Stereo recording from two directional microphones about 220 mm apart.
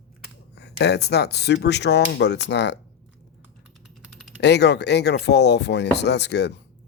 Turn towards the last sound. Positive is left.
turn(degrees=50)  # may be behind; listen again after turning